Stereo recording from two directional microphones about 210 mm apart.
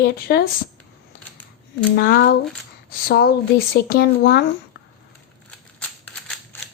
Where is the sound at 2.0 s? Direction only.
45° left (ahead or behind).